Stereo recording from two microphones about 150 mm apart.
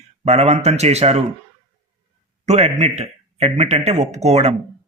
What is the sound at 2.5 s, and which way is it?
Speech, 50° right (ahead or behind).